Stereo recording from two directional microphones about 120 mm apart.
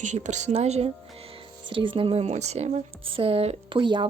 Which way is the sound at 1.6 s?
45° right (ahead or behind).